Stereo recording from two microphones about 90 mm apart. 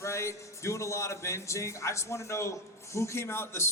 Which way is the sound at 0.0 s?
35° left (ahead or behind).